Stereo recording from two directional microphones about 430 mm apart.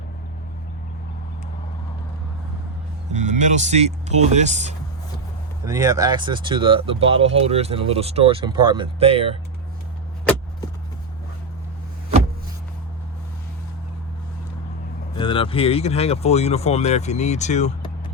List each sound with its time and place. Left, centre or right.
3.1 s speech: centre
15.2 s speech: centre